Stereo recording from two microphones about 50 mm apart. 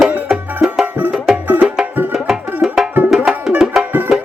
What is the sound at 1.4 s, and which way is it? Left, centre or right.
Music, right.